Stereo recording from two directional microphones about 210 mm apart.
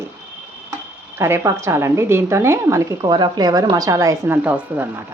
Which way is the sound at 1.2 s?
15° right (ahead or behind).